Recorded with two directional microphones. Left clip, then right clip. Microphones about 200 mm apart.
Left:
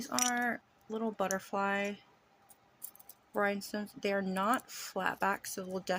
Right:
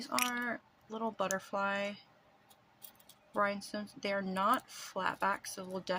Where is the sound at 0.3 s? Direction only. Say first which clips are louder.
Left 4 dB; 15° left (ahead or behind).